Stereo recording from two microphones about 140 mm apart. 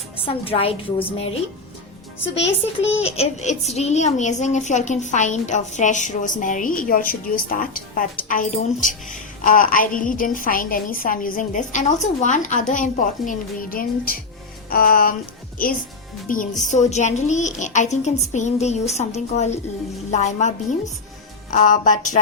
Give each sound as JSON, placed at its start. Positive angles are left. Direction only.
{"t": 0.3, "sound": "a woman's voice", "side_deg": 40}
{"t": 3.0, "sound": "a woman's voice", "side_deg": 50}
{"t": 14.7, "sound": "music", "side_deg": 90}
{"t": 16.3, "sound": "a woman's voice", "side_deg": 75}
{"t": 16.6, "sound": "a woman's voice", "side_deg": 55}
{"t": 21.5, "sound": "a woman's voice", "side_deg": 70}